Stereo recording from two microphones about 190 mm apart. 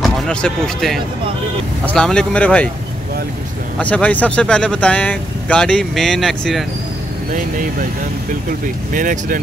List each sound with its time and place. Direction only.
0.0 s speech: 5° left (ahead or behind)
3.7 s speech: 5° left (ahead or behind)
8.9 s speech: 45° right (ahead or behind)